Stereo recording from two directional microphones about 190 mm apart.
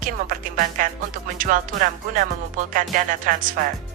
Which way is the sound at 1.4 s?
45° right (ahead or behind).